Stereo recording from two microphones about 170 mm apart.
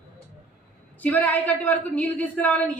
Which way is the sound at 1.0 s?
10° left (ahead or behind).